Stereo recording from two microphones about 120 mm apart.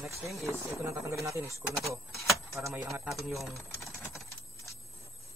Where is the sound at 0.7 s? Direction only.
25° right (ahead or behind).